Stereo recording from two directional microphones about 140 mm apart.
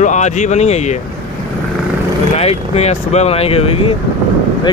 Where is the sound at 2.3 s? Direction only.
50° left (ahead or behind).